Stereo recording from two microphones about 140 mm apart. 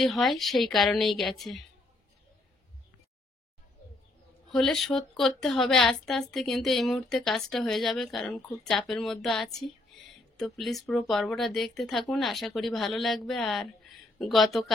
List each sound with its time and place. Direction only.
0.0 s a woman's voice: centre (ahead or behind)
4.5 s a woman's voice: centre (ahead or behind)